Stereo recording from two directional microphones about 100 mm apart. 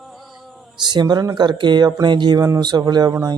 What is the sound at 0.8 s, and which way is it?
Speech, 45° right (ahead or behind).